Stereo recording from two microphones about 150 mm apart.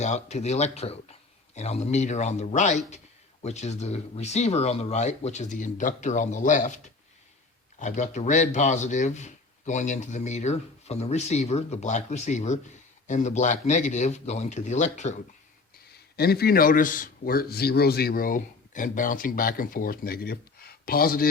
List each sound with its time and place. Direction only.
0.0 s speech: 50° left (ahead or behind)
7.8 s speech: 55° left (ahead or behind)
16.1 s speech: 90° left